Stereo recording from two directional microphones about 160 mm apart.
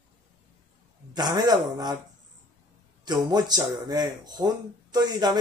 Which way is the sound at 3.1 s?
25° right (ahead or behind).